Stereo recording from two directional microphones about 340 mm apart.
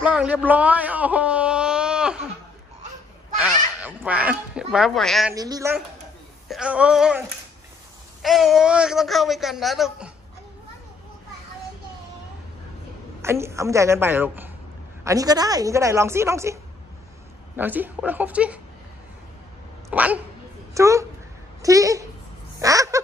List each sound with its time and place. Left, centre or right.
0.0 s speech: centre
3.3 s speech: centre
5.3 s a woman's voice: centre
13.2 s a woman's voice: centre
17.6 s speech: centre
19.9 s a woman's voice: centre